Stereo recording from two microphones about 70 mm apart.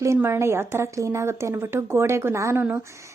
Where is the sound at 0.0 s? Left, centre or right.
Right.